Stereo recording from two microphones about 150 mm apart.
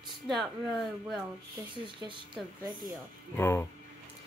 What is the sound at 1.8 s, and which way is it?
Speech, 35° right (ahead or behind).